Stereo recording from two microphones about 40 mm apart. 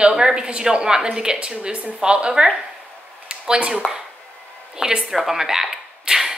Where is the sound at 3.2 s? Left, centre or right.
Right.